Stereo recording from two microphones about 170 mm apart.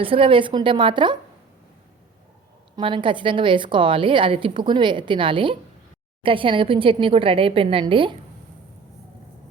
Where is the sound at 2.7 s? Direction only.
30° right (ahead or behind).